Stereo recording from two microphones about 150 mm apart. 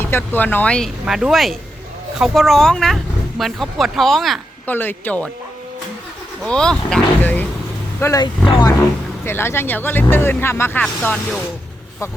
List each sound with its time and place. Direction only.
0.0 s speech: 15° left (ahead or behind)
1.0 s speech: 5° right (ahead or behind)
4.6 s speech: 15° left (ahead or behind)
6.4 s speech: 5° left (ahead or behind)
8.4 s speech: 30° left (ahead or behind)
9.2 s speech: 15° left (ahead or behind)